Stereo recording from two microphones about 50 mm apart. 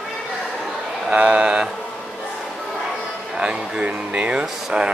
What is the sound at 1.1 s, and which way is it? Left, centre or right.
Speech, right.